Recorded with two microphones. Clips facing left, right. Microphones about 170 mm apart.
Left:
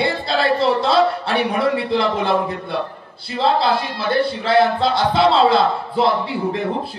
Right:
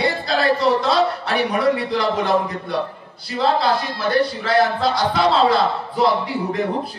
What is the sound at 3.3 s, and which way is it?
A man's voice, 30° left (ahead or behind).